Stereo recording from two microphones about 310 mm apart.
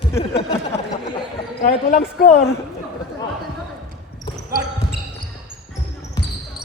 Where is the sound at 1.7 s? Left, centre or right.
Left.